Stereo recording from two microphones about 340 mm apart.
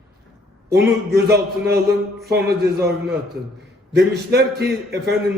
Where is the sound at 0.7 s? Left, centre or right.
Right.